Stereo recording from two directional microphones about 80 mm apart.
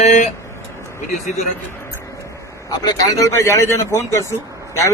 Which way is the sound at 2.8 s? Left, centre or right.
Left.